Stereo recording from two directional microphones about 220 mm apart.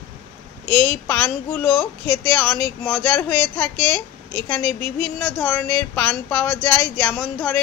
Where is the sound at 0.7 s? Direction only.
10° left (ahead or behind).